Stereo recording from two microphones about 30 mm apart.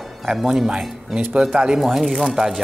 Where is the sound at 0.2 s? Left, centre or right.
Centre.